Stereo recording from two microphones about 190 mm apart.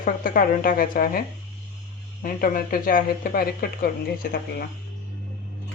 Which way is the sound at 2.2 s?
45° left (ahead or behind).